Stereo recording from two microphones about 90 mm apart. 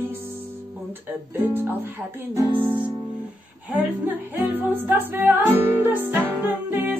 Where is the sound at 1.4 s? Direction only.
20° right (ahead or behind).